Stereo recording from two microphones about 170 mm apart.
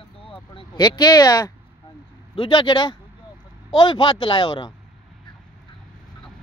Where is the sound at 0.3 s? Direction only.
30° left (ahead or behind).